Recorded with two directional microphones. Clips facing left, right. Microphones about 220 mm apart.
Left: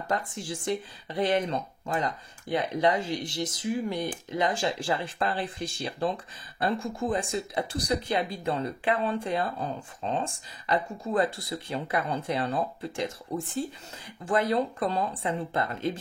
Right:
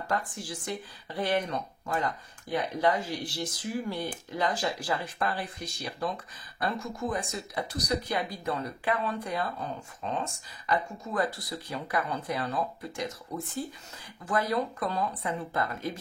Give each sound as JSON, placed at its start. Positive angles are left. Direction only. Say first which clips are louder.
{"t": 0.1, "sound": "speech", "louder": "left 2 dB", "side_deg": 25}